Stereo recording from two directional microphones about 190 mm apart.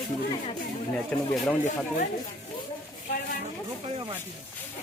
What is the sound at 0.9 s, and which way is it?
Speech, 5° left (ahead or behind).